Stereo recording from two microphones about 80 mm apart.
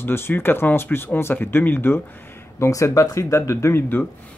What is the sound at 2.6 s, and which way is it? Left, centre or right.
Speech, left.